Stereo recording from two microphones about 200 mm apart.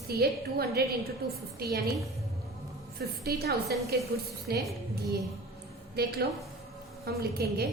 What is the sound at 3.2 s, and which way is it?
A woman's voice, 50° right (ahead or behind).